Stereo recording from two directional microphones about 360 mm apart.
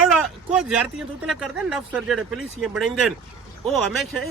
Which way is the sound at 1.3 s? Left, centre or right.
Centre.